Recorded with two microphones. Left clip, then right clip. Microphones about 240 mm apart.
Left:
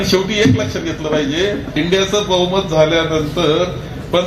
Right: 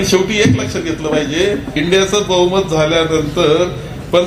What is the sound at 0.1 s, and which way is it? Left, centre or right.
A man's voice, right.